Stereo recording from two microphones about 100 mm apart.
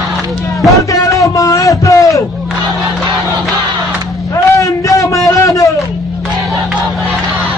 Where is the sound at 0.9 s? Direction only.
35° left (ahead or behind).